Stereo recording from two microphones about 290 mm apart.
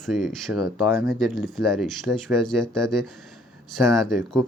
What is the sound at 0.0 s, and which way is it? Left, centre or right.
Speech, centre.